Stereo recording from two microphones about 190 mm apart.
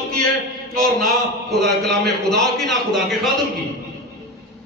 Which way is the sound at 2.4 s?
Centre (ahead or behind).